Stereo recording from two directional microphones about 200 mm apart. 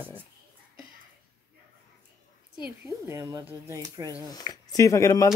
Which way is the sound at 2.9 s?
15° right (ahead or behind).